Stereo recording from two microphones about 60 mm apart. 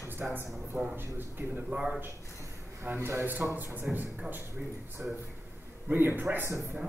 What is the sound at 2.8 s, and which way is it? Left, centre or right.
Speech, right.